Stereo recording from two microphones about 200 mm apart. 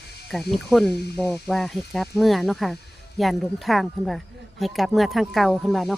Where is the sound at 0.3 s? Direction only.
Centre (ahead or behind).